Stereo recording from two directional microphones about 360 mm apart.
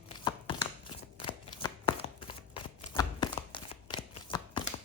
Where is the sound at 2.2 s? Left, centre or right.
Centre.